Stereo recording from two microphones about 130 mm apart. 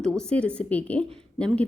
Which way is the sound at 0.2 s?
10° left (ahead or behind).